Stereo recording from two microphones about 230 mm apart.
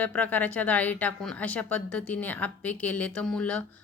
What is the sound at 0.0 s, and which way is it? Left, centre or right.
A woman's voice, centre.